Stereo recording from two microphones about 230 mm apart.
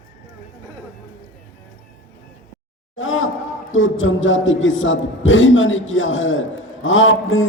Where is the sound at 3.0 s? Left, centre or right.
Left.